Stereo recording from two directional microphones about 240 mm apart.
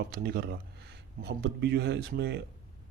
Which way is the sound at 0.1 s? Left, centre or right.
Right.